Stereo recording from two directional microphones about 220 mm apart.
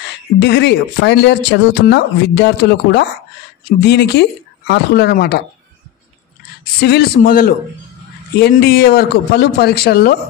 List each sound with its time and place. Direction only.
0.4 s speech: 50° left (ahead or behind)
6.8 s a man's voice: 45° left (ahead or behind)